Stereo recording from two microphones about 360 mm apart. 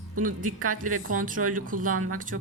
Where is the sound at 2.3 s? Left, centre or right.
Right.